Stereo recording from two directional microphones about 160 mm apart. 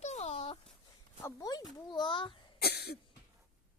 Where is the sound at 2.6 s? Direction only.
80° left.